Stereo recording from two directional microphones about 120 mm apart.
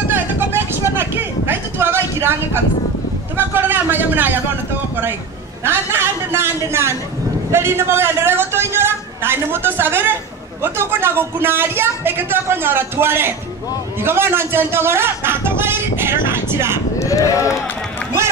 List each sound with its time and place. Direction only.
0.1 s vehicle: 15° right (ahead or behind)
0.9 s a sound: 20° right (ahead or behind)
5.6 s speech: 20° right (ahead or behind)
17.0 s speech: 25° left (ahead or behind)